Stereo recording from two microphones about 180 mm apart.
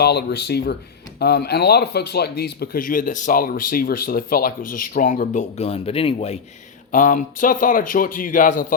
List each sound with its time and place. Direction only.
0.0 s speech: 65° left (ahead or behind); by 6.4 s 35° left (ahead or behind)
6.9 s speech: 45° left (ahead or behind)